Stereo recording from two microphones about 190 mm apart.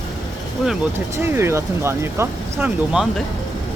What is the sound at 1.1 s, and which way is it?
Speech, 15° right (ahead or behind).